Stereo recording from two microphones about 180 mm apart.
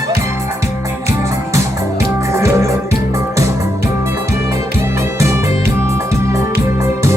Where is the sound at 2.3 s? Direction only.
15° right (ahead or behind).